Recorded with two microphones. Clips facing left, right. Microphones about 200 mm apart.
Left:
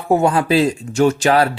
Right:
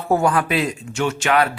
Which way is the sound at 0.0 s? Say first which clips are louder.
Left 3 dB; 20° left (ahead or behind).